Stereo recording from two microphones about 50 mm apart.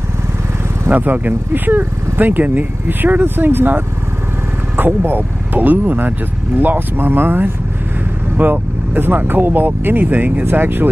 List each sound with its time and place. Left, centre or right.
0.8 s speech: right